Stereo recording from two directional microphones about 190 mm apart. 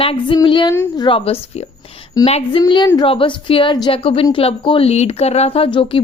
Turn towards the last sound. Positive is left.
turn(degrees=25)  # may be behind; listen again after turning